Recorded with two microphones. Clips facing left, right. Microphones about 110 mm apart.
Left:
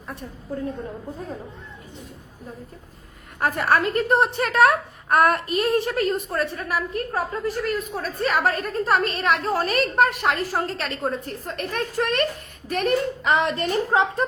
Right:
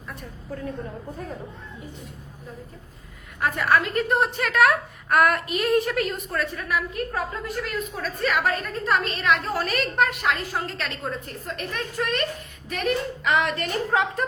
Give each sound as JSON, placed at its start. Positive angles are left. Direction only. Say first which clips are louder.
{"t": 3.4, "sound": "a woman's voice", "louder": "left 1 dB", "side_deg": 40}
{"t": 13.3, "sound": "a woman's voice", "louder": "left 2 dB", "side_deg": 30}